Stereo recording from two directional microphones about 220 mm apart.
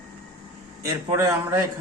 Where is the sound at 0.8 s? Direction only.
15° right (ahead or behind).